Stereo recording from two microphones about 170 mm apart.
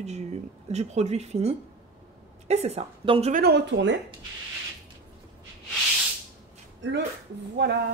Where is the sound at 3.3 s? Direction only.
70° right (ahead or behind); by 3.9 s 90° right.